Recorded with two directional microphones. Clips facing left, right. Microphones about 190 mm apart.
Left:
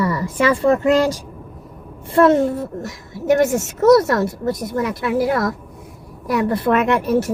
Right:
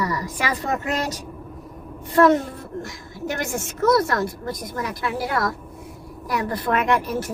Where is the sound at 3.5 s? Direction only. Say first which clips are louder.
Left 3 dB; 25° left (ahead or behind).